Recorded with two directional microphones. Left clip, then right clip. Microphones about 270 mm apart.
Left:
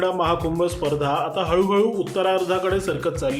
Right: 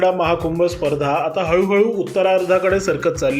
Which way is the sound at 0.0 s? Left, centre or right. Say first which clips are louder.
Right 5 dB; centre.